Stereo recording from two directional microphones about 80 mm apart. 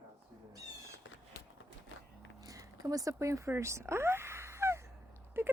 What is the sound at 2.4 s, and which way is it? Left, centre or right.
Speech, right.